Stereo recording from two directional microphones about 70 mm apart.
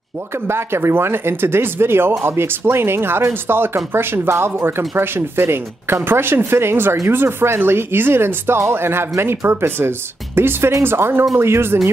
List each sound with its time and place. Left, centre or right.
0.5 s speech: right